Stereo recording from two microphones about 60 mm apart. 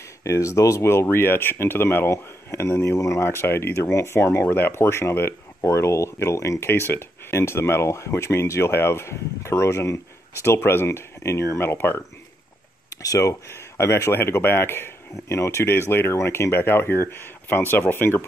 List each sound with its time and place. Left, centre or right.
0.2 s speech: left
0.9 s speech: left
2.0 s speech: left
6.6 s speech: left
12.9 s speech: left
13.7 s speech: left
14.1 s speech: left
15.7 s speech: left